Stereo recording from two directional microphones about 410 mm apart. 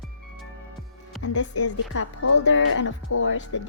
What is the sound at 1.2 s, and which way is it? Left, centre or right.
Speech, left.